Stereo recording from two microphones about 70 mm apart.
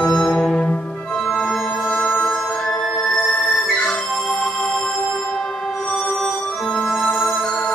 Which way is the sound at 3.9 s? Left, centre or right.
Centre.